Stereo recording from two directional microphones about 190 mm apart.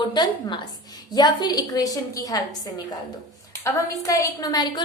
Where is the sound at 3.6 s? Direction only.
15° left (ahead or behind).